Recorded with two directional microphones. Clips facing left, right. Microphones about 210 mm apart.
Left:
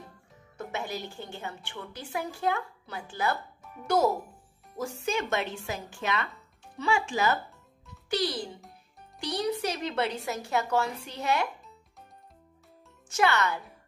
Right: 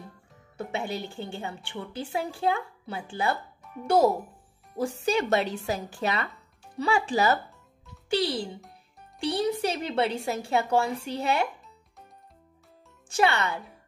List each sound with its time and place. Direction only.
0.6 s a woman's voice: 30° right (ahead or behind)
13.1 s a woman's voice: 30° right (ahead or behind)